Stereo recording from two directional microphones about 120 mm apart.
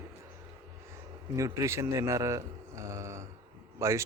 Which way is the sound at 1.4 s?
25° right (ahead or behind).